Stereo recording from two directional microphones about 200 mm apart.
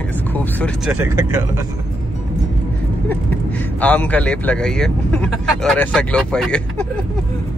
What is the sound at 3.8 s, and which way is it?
Speech, 5° left (ahead or behind).